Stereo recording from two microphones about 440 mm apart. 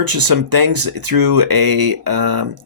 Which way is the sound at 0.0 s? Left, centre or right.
Right.